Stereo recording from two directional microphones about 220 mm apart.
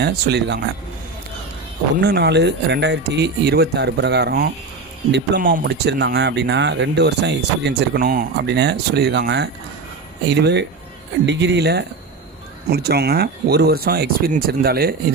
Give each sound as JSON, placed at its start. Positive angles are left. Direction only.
{"t": 0.0, "sound": "speech", "side_deg": -50}
{"t": 2.0, "sound": "speech", "side_deg": -50}